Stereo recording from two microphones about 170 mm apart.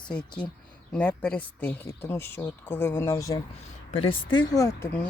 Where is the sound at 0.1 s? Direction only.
5° left (ahead or behind).